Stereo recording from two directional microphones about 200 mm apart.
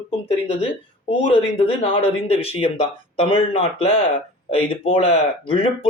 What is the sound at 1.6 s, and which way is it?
Speech, 30° left (ahead or behind).